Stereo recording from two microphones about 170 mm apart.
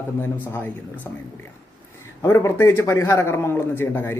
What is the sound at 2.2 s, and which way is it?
Speech, 15° left (ahead or behind).